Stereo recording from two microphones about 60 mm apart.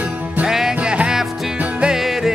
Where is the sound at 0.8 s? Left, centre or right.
Centre.